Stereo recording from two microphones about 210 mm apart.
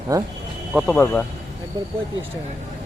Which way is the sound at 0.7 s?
Centre (ahead or behind).